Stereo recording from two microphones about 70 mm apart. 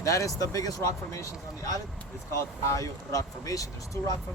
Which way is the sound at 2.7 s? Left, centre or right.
Left.